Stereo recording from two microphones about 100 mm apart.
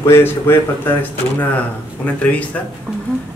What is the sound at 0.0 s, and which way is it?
Speech, 25° left (ahead or behind).